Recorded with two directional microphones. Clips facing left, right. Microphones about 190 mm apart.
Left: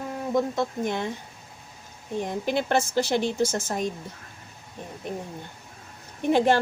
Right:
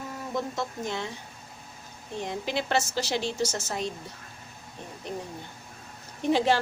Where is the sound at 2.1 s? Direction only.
50° left (ahead or behind).